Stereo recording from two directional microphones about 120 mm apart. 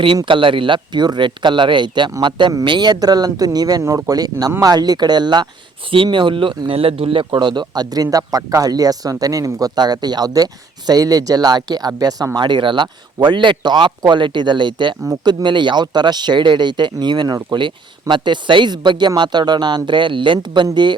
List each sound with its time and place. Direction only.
0.3 s speech: 45° right (ahead or behind)